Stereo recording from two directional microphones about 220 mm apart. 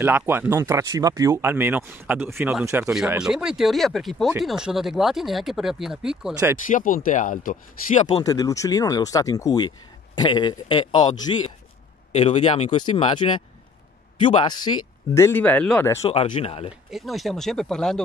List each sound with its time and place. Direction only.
0.0 s speech: 10° right (ahead or behind)
6.7 s speech: 40° left (ahead or behind)
8.2 s speech: 15° left (ahead or behind)
16.1 s speech: 25° left (ahead or behind)
16.9 s speech: centre (ahead or behind)